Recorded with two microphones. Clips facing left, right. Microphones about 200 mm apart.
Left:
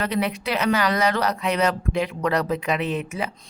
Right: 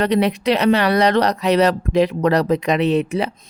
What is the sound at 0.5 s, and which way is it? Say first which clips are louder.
Speech: right 5 dB; 35° right (ahead or behind).